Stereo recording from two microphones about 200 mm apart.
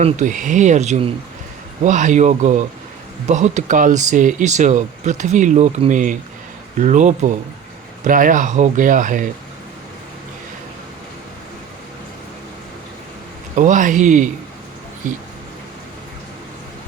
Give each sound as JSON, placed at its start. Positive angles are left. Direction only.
{"t": 0.0, "sound": "speech", "side_deg": -40}
{"t": 13.6, "sound": "speech", "side_deg": -40}